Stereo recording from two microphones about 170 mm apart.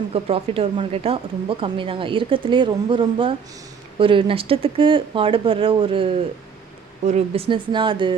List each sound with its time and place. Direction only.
0.1 s speech: 35° right (ahead or behind)